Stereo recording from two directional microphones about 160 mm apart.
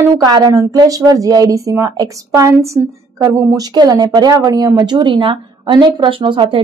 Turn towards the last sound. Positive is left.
turn(degrees=-30)  # may be behind; listen again after turning